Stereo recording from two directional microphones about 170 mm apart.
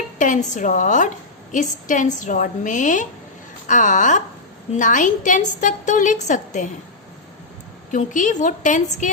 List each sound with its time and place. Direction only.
0.2 s a woman's voice: 50° left (ahead or behind)
7.9 s a woman's voice: 50° left (ahead or behind)